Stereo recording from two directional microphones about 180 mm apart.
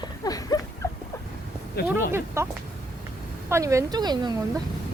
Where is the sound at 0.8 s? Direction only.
15° left (ahead or behind).